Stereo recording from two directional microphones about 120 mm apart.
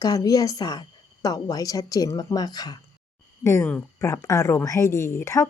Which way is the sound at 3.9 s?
25° left (ahead or behind).